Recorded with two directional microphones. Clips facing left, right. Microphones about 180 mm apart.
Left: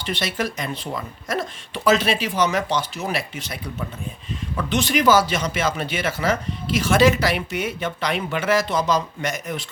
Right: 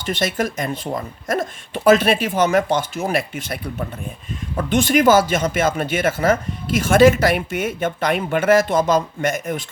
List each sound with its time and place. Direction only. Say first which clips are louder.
0.0 s speech: right 4 dB; 45° right (ahead or behind)